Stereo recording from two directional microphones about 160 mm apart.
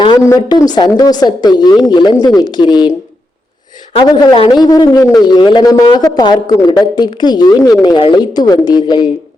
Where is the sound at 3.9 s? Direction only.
35° left (ahead or behind).